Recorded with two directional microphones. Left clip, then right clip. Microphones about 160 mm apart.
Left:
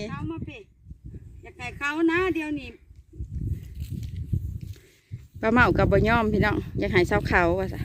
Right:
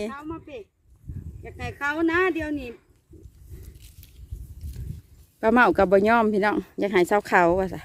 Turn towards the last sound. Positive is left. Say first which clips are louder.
# right 3 dB
turn(degrees=0)  # may be behind; listen again after turning